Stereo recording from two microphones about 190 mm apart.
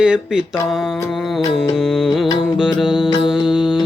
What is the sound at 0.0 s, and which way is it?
Music, 5° right (ahead or behind).